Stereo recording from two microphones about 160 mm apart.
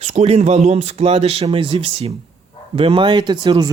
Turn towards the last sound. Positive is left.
turn(degrees=-30)  # may be behind; listen again after turning